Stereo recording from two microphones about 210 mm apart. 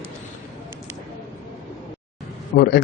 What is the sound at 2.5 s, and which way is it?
Speech, 55° left (ahead or behind).